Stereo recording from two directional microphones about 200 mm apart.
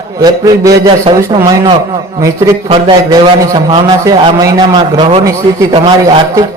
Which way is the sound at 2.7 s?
20° right (ahead or behind).